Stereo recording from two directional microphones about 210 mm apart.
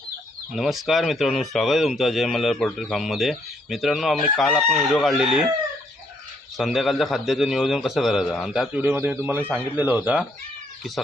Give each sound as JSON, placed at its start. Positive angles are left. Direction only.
{"t": 0.5, "sound": "speech", "side_deg": 0}
{"t": 6.6, "sound": "speech", "side_deg": 0}